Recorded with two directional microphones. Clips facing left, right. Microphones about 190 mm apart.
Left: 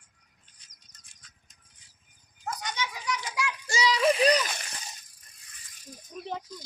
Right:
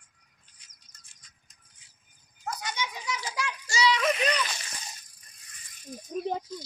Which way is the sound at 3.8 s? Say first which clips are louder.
Left 4 dB; 30° left (ahead or behind).